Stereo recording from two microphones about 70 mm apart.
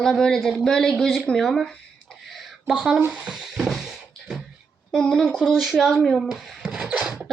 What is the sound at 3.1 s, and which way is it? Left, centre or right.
Music, centre.